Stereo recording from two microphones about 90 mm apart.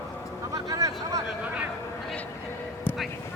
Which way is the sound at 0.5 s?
40° right (ahead or behind).